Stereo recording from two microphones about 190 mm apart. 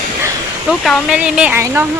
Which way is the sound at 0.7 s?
Centre (ahead or behind).